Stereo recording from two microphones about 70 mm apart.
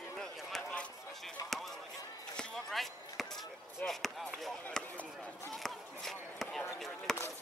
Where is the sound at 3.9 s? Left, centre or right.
Centre.